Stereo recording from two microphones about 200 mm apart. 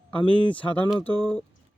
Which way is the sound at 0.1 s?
5° left (ahead or behind).